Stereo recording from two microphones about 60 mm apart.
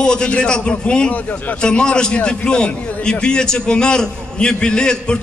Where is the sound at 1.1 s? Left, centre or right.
Left.